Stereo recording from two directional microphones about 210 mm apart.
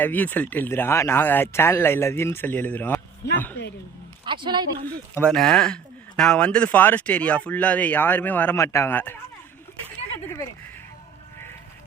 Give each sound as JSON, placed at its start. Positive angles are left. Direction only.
{"t": 0.0, "sound": "speech", "side_deg": 10}
{"t": 3.3, "sound": "music", "side_deg": 10}
{"t": 4.3, "sound": "speech", "side_deg": -20}
{"t": 4.9, "sound": "speech", "side_deg": 5}